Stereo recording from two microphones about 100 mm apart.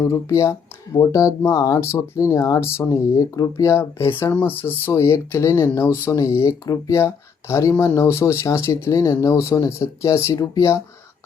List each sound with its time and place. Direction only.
0.0 s speech: 30° left (ahead or behind)